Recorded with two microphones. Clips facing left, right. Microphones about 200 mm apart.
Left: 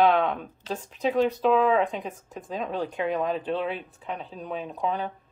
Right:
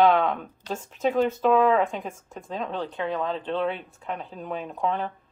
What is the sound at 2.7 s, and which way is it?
Speech, 10° left (ahead or behind).